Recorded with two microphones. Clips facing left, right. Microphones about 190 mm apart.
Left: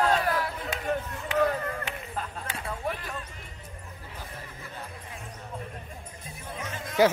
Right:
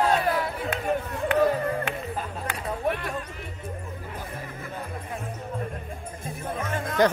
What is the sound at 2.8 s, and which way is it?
Music, 60° right (ahead or behind).